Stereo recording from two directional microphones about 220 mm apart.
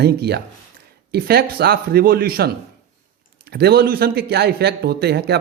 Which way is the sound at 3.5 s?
45° right (ahead or behind).